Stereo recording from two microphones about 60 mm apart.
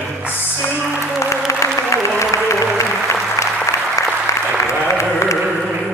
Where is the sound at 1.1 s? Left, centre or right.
Left.